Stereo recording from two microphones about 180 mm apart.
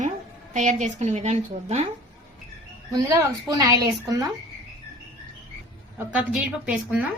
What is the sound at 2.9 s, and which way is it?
A woman's voice, 20° right (ahead or behind).